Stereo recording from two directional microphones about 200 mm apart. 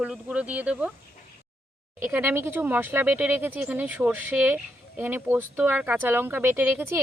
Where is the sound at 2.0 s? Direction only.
10° right (ahead or behind).